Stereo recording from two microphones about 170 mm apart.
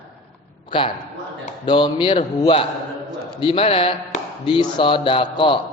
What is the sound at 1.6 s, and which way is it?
A man's voice, 30° left (ahead or behind).